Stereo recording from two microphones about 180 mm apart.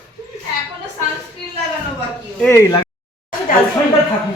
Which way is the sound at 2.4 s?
15° left (ahead or behind).